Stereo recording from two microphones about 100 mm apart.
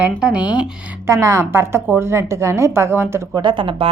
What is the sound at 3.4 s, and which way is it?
Speech, 55° right (ahead or behind).